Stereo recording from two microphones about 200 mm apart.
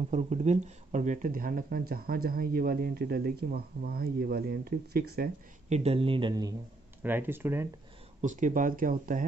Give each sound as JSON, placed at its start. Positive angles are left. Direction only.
{"t": 0.1, "sound": "speech", "side_deg": -35}
{"t": 5.7, "sound": "speech", "side_deg": -30}
{"t": 7.0, "sound": "speech", "side_deg": -10}
{"t": 8.2, "sound": "speech", "side_deg": -40}